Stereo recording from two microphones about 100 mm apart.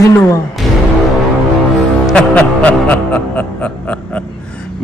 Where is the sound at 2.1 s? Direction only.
15° left (ahead or behind).